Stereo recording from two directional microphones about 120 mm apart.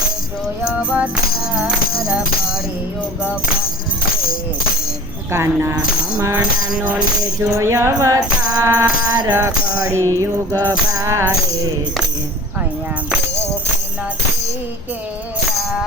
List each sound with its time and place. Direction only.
0.7 s music: 10° right (ahead or behind)
5.3 s music: 20° right (ahead or behind)
6.7 s music: 10° right (ahead or behind)
7.2 s music: 25° right (ahead or behind)